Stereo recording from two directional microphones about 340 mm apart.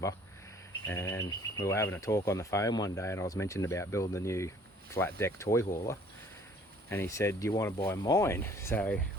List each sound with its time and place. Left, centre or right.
0.9 s speech: centre
6.9 s speech: centre